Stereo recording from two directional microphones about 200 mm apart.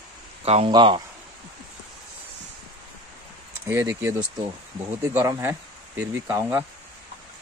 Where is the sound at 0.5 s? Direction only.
25° right (ahead or behind).